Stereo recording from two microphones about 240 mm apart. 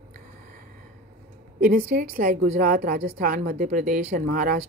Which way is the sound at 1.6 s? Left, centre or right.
Right.